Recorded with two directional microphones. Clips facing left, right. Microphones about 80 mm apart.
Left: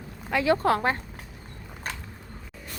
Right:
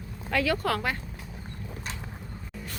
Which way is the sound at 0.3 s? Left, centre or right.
Left.